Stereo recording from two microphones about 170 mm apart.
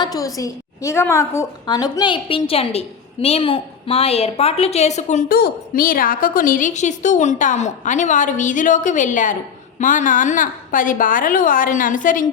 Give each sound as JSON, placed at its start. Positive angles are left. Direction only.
{"t": 0.0, "sound": "a woman's voice", "side_deg": 20}
{"t": 5.4, "sound": "a woman's voice", "side_deg": 55}